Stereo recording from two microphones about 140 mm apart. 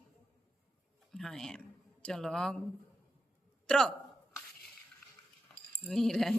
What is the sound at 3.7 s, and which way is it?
Speech, 5° left (ahead or behind).